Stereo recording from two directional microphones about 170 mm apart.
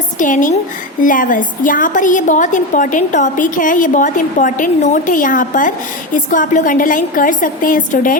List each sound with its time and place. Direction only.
0.2 s a woman's voice: 50° left (ahead or behind)